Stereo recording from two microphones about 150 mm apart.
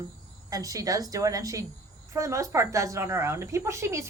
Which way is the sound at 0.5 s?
25° right (ahead or behind).